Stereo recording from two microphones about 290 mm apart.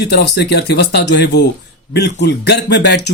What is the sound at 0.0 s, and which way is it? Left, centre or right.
Speech, left.